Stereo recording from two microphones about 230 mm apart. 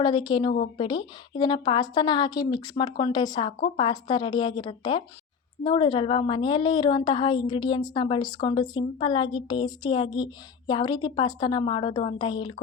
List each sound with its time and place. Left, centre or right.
0.0 s a woman's voice: centre